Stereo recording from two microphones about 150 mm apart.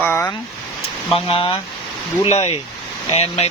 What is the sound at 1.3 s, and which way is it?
Speech, 35° left (ahead or behind).